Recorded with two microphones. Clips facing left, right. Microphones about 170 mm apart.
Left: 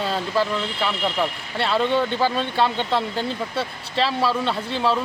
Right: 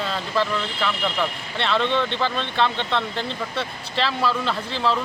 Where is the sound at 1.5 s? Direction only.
5° left (ahead or behind).